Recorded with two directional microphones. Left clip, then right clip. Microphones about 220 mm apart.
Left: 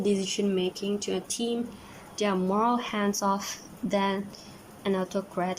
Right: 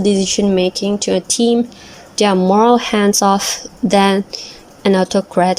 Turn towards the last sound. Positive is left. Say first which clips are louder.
# right 16 dB
turn(degrees=-35)  # may be behind; listen again after turning